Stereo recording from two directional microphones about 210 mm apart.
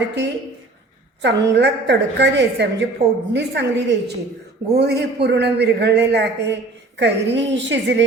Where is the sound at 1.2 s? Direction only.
55° right (ahead or behind).